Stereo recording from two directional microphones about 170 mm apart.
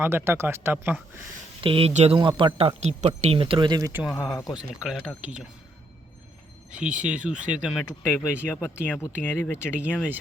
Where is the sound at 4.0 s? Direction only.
Centre (ahead or behind).